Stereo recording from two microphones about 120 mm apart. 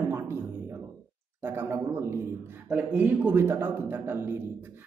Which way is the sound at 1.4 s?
20° right (ahead or behind).